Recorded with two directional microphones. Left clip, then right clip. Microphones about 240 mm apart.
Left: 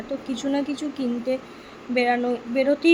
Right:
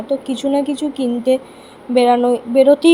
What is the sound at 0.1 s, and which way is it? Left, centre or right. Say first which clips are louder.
Speech: right 9 dB; centre.